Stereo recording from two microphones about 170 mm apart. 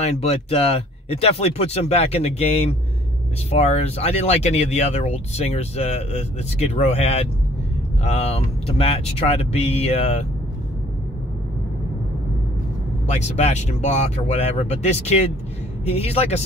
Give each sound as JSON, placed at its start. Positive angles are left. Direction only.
{"t": 0.0, "sound": "speech", "side_deg": 40}
{"t": 13.0, "sound": "speech", "side_deg": 40}